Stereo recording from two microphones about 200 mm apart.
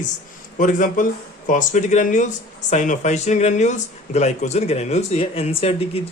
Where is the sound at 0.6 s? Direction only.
40° left (ahead or behind).